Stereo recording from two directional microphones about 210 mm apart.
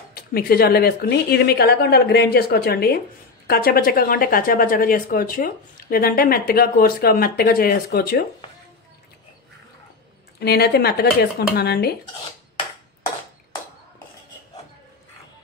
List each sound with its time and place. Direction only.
0.1 s speech: 45° left (ahead or behind)
10.4 s speech: 50° left (ahead or behind)